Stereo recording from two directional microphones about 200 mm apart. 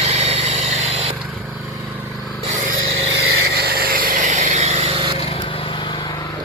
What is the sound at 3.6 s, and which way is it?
Vehicle, 50° right (ahead or behind).